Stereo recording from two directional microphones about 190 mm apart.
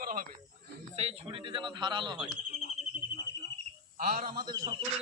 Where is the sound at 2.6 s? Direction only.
35° left (ahead or behind).